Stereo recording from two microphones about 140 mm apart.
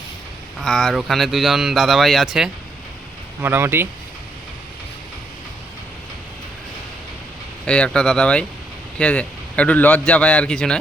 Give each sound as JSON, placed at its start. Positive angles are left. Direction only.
{"t": 0.6, "sound": "speech", "side_deg": 5}
{"t": 3.4, "sound": "speech", "side_deg": -15}
{"t": 7.6, "sound": "a man's voice", "side_deg": 5}